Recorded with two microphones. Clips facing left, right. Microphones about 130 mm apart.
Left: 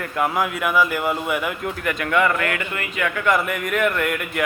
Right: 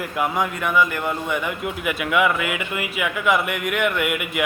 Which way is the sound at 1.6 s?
10° right (ahead or behind).